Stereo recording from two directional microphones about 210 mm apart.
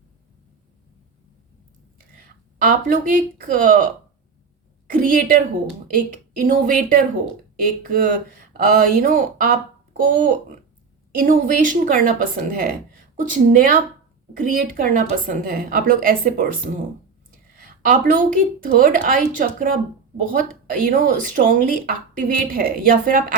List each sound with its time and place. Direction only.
2.0 s a woman's voice: 40° right (ahead or behind)
17.6 s a woman's voice: 40° right (ahead or behind)